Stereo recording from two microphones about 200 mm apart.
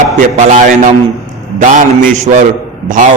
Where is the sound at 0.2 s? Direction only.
40° right (ahead or behind).